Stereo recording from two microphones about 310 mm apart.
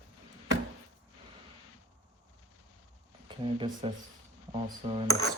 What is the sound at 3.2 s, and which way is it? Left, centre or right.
Speech, centre.